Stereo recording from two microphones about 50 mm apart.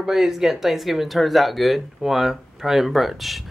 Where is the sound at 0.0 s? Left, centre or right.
Centre.